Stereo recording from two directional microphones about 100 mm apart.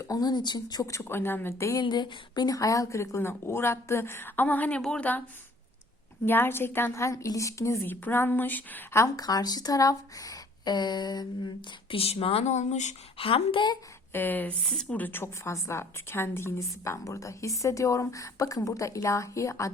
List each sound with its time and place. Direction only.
0.0 s speech: 40° left (ahead or behind)
1.8 s a woman's voice: 45° left (ahead or behind); by 5.2 s 15° left (ahead or behind)
6.2 s a woman's voice: 20° left (ahead or behind)
9.1 s speech: 40° left (ahead or behind)
11.9 s speech: 75° left (ahead or behind)
13.1 s speech: 65° left (ahead or behind)
14.1 s speech: 20° left (ahead or behind)
14.6 s a woman's voice: 5° left (ahead or behind)
14.9 s a woman's voice: 20° left (ahead or behind)